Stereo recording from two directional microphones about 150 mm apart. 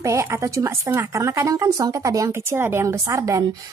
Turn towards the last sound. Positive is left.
turn(degrees=-20)  # may be behind; listen again after turning